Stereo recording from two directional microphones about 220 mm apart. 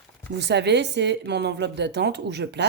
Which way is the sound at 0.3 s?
50° right (ahead or behind).